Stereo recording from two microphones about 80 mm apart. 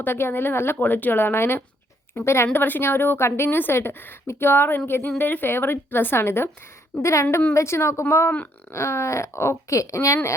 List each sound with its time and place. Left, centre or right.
0.0 s a woman's voice: left